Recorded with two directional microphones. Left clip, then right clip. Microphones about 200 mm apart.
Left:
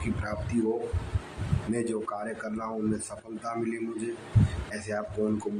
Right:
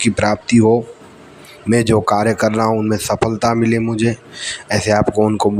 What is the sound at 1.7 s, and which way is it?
Speech, 45° right (ahead or behind).